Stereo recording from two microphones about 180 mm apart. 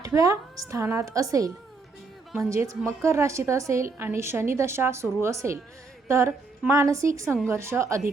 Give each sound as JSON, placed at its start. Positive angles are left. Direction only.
{"t": 0.0, "sound": "a woman's voice", "side_deg": -20}